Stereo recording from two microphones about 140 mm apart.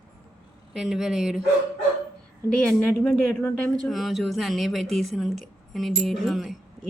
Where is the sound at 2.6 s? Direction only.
10° left (ahead or behind).